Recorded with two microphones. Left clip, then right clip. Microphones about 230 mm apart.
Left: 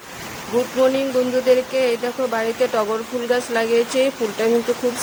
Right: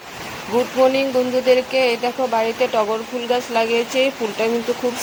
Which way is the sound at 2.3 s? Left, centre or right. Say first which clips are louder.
Right 1 dB; centre.